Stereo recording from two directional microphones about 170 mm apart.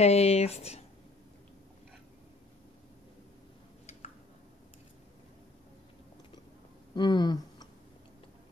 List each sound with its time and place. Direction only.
0.0 s speech: 40° left (ahead or behind)
7.0 s speech: 25° left (ahead or behind)